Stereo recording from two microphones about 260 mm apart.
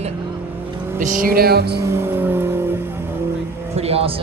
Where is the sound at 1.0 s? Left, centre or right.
Right.